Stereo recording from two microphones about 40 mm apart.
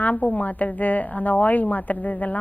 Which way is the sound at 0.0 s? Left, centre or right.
Left.